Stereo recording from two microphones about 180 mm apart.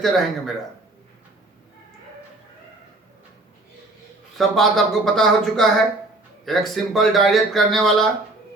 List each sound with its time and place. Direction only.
0.0 s speech: centre (ahead or behind)
4.4 s speech: centre (ahead or behind)